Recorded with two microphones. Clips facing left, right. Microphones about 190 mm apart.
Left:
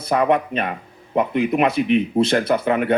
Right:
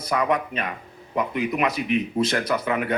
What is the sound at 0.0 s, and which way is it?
Speech, 30° left (ahead or behind).